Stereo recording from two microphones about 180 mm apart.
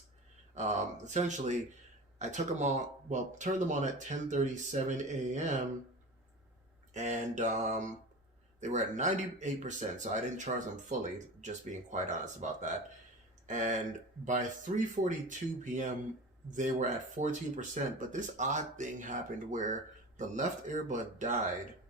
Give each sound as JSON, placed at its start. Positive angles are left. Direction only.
{"t": 0.5, "sound": "speech", "side_deg": -40}
{"t": 6.9, "sound": "speech", "side_deg": -40}
{"t": 14.3, "sound": "speech", "side_deg": -45}